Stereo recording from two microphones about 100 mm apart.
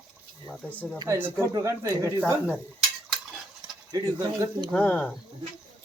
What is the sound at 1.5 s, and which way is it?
Speech, 35° right (ahead or behind).